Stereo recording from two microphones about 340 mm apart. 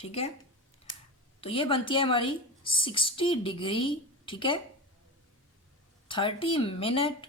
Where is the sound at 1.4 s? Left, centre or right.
Centre.